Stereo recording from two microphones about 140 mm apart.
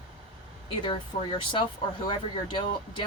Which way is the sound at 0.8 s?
30° left (ahead or behind).